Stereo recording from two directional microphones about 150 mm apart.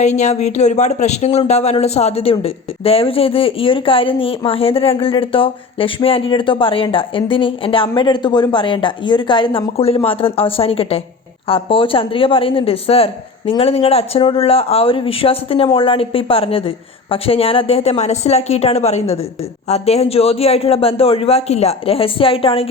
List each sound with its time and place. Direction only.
0.0 s speech: 50° left (ahead or behind)